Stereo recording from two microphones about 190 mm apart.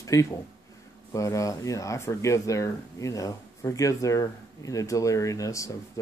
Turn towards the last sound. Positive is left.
turn(degrees=15)  # may be behind; listen again after turning